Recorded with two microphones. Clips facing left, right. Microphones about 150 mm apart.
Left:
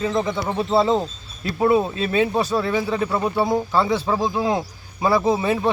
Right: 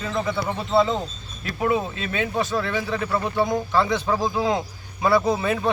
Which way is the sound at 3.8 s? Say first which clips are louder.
Left 2 dB; 5° left (ahead or behind).